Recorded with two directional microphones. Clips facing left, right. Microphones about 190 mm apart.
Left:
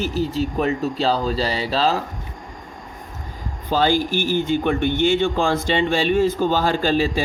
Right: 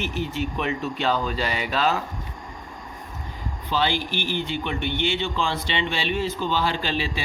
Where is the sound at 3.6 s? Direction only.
45° left (ahead or behind).